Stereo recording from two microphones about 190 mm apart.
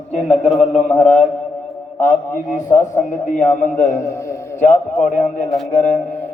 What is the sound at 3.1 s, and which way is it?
A man's voice, 40° left (ahead or behind).